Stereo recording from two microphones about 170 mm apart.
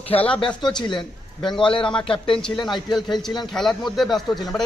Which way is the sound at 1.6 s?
30° left (ahead or behind).